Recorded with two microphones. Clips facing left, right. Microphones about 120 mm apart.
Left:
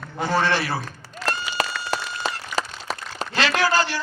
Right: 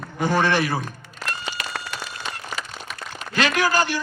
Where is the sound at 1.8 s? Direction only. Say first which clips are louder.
Left 6 dB; 35° left (ahead or behind).